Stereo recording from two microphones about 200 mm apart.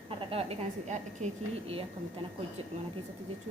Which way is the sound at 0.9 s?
35° right (ahead or behind).